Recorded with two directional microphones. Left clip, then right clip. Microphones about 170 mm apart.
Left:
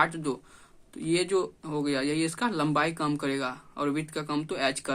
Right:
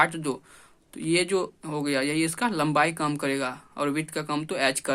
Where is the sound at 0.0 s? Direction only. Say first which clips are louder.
Right 3 dB; 25° right (ahead or behind).